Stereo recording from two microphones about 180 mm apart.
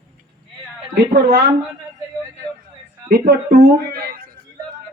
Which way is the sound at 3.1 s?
60° right (ahead or behind).